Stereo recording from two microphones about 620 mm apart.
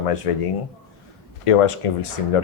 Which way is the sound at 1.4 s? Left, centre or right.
Left.